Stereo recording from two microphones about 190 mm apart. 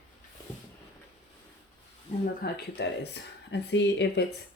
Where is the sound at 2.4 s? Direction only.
60° left (ahead or behind).